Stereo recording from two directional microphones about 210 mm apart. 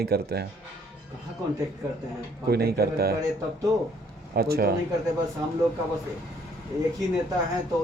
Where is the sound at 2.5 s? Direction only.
50° right (ahead or behind).